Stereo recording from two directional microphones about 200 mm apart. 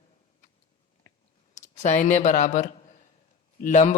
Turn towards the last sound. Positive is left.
turn(degrees=40)  # may be behind; listen again after turning